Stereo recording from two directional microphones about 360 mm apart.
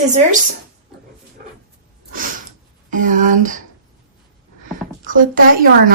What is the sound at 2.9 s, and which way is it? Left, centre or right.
Speech, right.